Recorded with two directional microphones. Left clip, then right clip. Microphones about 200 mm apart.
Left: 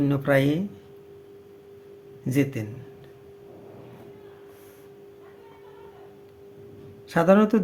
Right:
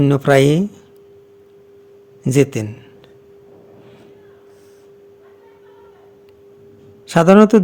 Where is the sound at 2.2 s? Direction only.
50° right (ahead or behind).